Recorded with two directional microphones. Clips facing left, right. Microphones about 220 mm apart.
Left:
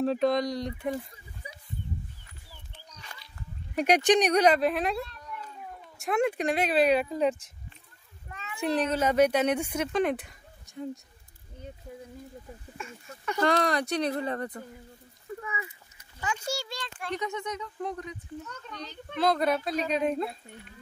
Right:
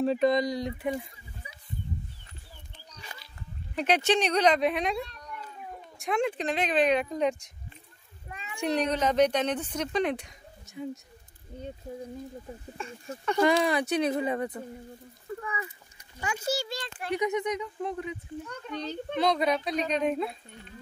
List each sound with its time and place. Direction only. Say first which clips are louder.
0.0 s speech: right 1 dB; centre (ahead or behind)
3.7 s speech: left 3 dB; 10° left (ahead or behind)
8.3 s a sound: even; 15° right (ahead or behind)
8.5 s speech: even; 5° left (ahead or behind)
12.7 s speech: right 4 dB; 35° right (ahead or behind)
13.4 s a child's voice: right 2 dB; 10° right (ahead or behind)
16.2 s a child's voice: right 2 dB; 10° right (ahead or behind)
17.8 s a child's voice: right 2 dB; 5° right (ahead or behind)